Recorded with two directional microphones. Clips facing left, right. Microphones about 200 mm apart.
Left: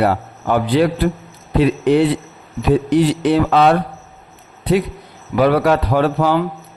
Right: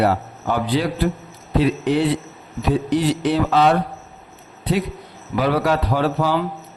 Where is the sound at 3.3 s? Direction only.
60° left (ahead or behind).